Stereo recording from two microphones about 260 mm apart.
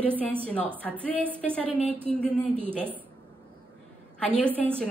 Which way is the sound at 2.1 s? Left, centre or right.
Centre.